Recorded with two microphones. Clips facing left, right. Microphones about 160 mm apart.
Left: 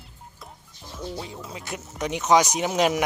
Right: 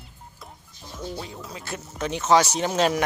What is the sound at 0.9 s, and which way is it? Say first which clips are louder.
Music: even; 5° left (ahead or behind).